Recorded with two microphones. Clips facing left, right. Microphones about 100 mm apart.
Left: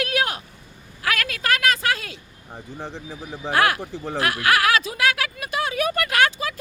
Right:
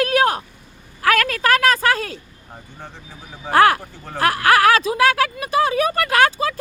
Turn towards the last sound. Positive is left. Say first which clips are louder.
# right 4 dB
turn(degrees=-35)  # may be behind; listen again after turning